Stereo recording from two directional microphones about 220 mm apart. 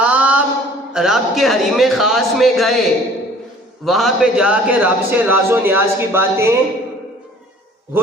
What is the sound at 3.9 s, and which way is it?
A man's voice, centre (ahead or behind).